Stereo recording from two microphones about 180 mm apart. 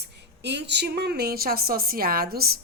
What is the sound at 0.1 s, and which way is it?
A woman's voice, 70° right (ahead or behind).